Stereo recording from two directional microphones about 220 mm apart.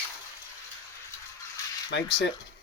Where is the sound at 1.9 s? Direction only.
50° left (ahead or behind).